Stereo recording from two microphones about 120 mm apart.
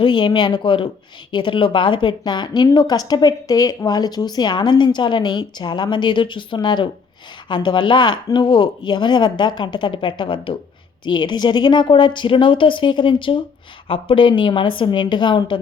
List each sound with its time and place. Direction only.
0.0 s a woman's voice: 40° left (ahead or behind)